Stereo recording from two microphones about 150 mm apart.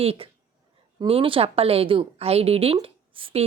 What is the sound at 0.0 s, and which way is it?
A woman's voice, 40° right (ahead or behind).